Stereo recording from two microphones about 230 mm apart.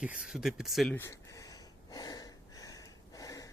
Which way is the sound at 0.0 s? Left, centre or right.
Centre.